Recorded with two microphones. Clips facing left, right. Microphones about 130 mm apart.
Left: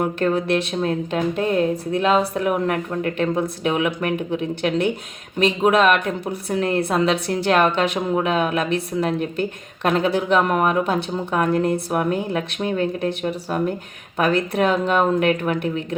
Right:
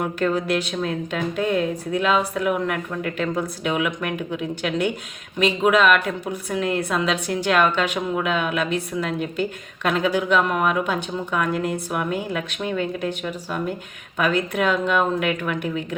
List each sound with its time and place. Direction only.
0.0 s speech: 30° left (ahead or behind)